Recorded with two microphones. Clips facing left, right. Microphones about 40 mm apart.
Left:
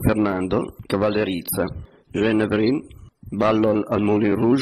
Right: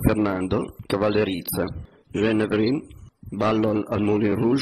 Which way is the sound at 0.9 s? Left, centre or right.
Centre.